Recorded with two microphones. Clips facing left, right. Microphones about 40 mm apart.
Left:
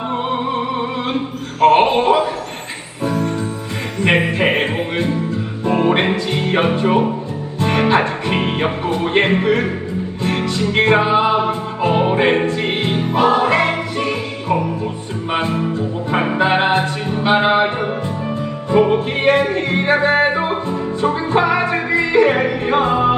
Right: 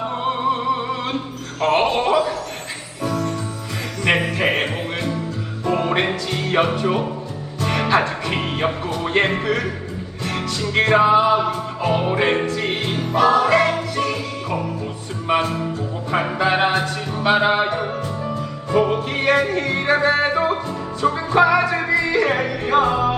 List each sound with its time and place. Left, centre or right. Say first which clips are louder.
1.6 s speech: left 6 dB; left
3.1 s music: left 4 dB; left
15.3 s music: left 1 dB; left